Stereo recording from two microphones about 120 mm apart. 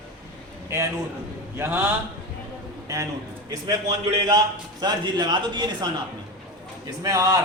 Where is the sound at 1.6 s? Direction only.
20° right (ahead or behind).